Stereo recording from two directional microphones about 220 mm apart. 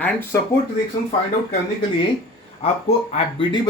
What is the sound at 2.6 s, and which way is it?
Speech, 25° left (ahead or behind).